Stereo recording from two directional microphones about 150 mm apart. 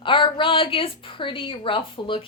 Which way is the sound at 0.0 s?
35° left (ahead or behind).